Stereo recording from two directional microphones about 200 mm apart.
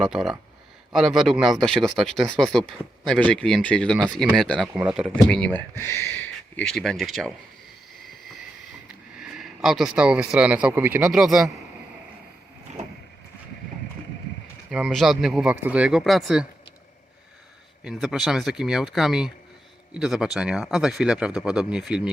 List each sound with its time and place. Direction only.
0.0 s speech: centre (ahead or behind)
4.7 s speech: 5° right (ahead or behind)
9.2 s speech: centre (ahead or behind)
12.7 s vehicle: 35° right (ahead or behind)
14.7 s speech: centre (ahead or behind)
17.8 s speech: centre (ahead or behind)